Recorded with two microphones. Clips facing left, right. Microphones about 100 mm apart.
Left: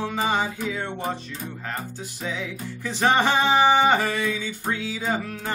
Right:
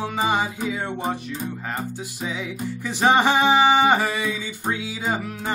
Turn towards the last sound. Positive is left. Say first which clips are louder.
# right 1 dB
turn(degrees=-15)  # may be behind; listen again after turning